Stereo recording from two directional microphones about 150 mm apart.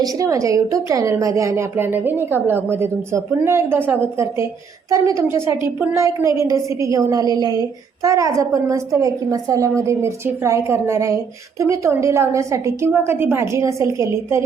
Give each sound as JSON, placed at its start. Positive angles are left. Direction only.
{"t": 0.0, "sound": "a woman's voice", "side_deg": -20}